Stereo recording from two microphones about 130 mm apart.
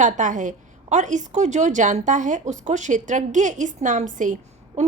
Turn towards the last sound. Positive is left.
turn(degrees=-80)